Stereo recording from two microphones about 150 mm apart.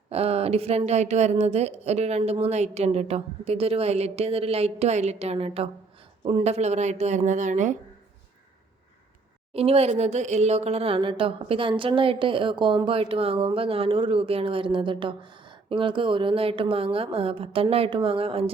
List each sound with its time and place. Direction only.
0.1 s a woman's voice: 40° right (ahead or behind)
9.5 s speech: 40° right (ahead or behind)